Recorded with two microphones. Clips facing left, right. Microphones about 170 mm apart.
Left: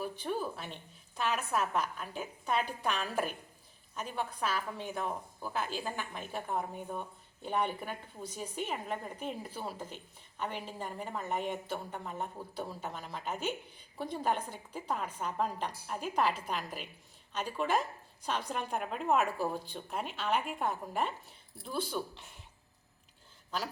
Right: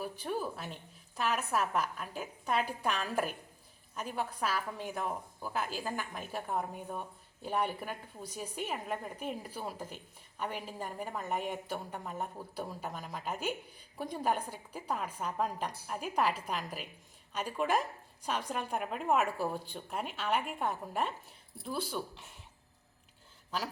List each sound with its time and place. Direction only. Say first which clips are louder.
0.0 s a woman's voice: left 1 dB; 5° right (ahead or behind)